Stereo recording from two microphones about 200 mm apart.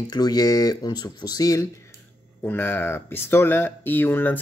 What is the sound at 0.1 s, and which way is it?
Speech, 20° left (ahead or behind).